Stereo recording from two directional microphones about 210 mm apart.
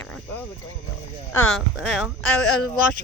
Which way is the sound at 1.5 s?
Centre (ahead or behind).